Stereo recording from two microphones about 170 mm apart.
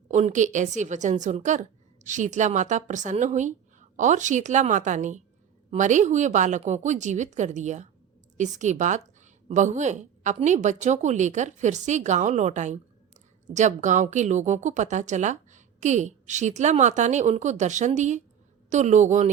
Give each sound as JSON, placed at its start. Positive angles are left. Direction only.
{"t": 0.1, "sound": "a woman's voice", "side_deg": -45}